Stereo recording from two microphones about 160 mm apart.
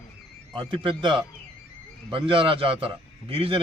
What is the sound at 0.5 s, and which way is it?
A man's voice, 35° right (ahead or behind).